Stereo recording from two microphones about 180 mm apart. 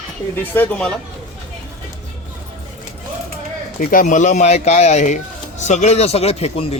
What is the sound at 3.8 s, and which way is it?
Speech, 45° left (ahead or behind).